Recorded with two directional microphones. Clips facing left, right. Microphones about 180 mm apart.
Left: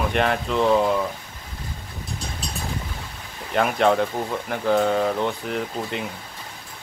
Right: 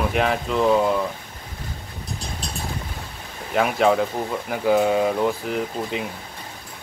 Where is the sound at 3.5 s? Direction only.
Centre (ahead or behind).